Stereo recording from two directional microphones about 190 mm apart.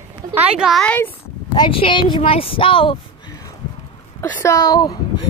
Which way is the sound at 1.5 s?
25° left (ahead or behind).